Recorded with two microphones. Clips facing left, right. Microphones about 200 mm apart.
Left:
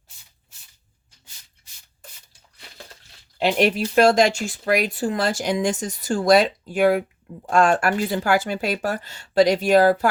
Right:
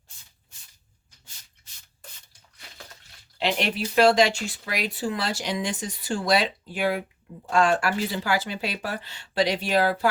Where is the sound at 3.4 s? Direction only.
45° left (ahead or behind).